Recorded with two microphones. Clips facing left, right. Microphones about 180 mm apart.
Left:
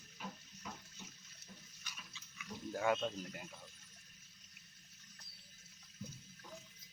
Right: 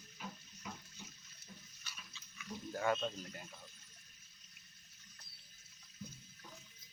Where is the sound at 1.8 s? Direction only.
15° left (ahead or behind).